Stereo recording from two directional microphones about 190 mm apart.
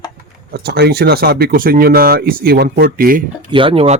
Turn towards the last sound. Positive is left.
turn(degrees=-30)  # may be behind; listen again after turning